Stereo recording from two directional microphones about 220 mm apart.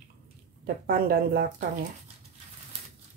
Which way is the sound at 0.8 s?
45° right (ahead or behind).